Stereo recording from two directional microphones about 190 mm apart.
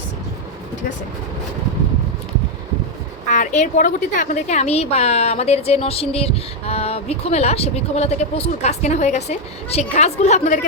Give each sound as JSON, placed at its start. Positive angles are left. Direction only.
{"t": 3.2, "sound": "a woman's voice", "side_deg": 40}